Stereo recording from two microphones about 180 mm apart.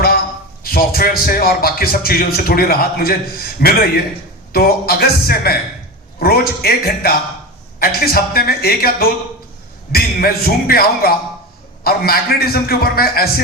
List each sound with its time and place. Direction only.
0.6 s a man's voice: 55° left (ahead or behind)